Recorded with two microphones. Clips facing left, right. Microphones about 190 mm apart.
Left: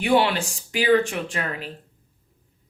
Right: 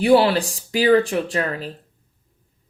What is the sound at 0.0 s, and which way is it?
Speech, 35° right (ahead or behind).